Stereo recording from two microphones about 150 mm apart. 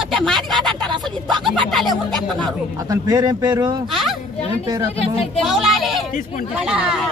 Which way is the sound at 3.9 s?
Centre (ahead or behind).